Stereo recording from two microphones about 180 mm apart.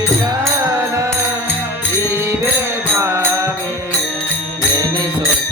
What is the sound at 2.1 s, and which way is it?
Music, 15° right (ahead or behind).